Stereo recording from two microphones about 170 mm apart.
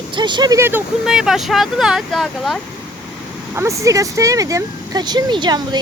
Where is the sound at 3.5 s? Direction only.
15° right (ahead or behind).